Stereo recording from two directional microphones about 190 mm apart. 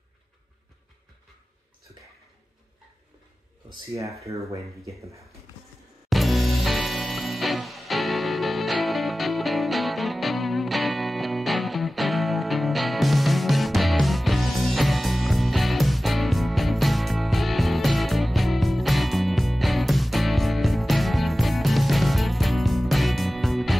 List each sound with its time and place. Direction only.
4.2 s speech: 15° right (ahead or behind)
6.0 s music: centre (ahead or behind)